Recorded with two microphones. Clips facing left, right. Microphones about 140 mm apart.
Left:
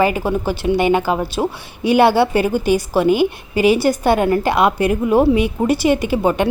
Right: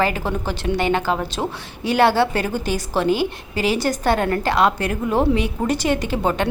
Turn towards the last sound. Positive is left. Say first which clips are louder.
# left 4 dB
turn(degrees=10)  # may be behind; listen again after turning